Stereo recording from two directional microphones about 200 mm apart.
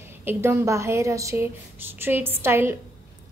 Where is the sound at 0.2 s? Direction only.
10° right (ahead or behind).